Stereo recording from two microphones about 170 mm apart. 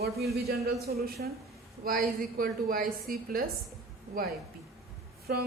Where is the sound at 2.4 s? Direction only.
60° right (ahead or behind).